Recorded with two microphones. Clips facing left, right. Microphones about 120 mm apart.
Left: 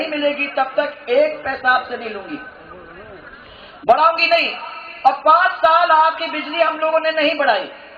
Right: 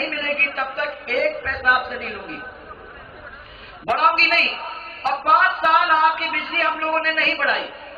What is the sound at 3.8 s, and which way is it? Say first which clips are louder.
Speech: left 6 dB; 15° left (ahead or behind).